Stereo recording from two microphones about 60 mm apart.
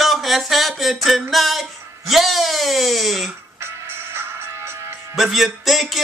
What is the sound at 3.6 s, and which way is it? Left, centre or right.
Music, right.